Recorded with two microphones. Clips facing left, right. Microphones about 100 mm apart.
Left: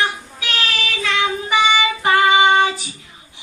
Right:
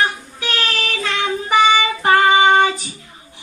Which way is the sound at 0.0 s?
40° right (ahead or behind).